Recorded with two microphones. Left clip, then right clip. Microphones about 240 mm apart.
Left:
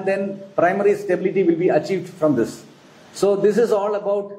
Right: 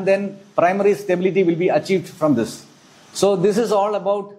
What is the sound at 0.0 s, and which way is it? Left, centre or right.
A man's voice, right.